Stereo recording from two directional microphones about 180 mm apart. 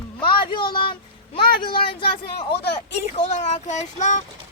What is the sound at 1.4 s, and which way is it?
Speech, 55° left (ahead or behind).